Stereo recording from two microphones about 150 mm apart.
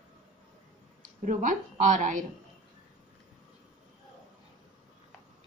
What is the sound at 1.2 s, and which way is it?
A woman's voice, 60° right (ahead or behind).